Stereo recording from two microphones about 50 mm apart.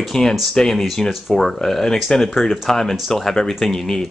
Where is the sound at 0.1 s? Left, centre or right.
Centre.